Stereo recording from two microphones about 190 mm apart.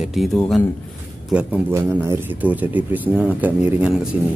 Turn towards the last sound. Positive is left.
turn(degrees=-5)  # may be behind; listen again after turning